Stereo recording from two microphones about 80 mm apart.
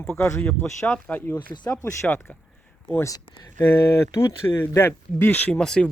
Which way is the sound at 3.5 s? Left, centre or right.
Left.